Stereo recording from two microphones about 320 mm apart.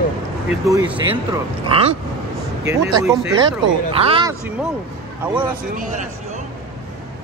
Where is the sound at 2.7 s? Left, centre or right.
Centre.